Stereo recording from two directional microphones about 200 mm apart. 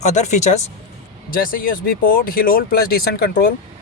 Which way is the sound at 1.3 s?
45° left (ahead or behind).